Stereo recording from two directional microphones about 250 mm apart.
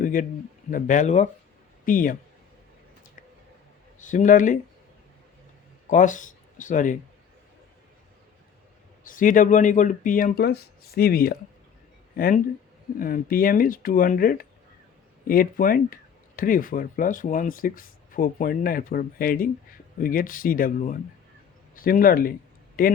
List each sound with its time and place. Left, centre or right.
0.0 s a sound: left
0.7 s speech: left
4.0 s speech: left
5.9 s speech: left
9.0 s speech: left
21.8 s a sound: left